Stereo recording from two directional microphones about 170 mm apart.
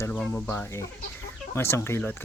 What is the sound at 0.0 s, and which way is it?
Speech, 10° left (ahead or behind).